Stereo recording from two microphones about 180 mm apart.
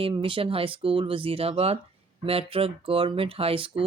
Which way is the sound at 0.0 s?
30° right (ahead or behind).